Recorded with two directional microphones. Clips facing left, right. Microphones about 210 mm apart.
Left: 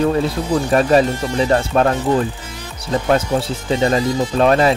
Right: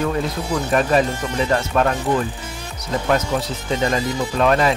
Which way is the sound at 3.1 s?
30° left (ahead or behind).